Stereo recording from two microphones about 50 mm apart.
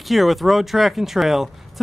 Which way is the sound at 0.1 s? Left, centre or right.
Centre.